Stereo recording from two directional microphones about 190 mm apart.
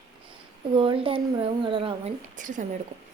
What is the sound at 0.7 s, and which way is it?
A woman's voice, 25° right (ahead or behind).